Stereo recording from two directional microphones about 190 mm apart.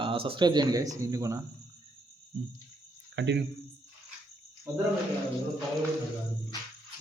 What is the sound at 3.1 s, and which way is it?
Speech, 70° right (ahead or behind).